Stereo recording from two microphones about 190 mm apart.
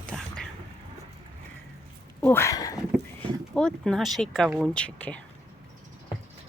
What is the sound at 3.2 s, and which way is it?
Speech, 5° left (ahead or behind).